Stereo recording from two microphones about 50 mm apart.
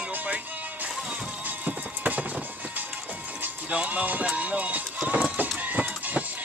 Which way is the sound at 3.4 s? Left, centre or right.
Right.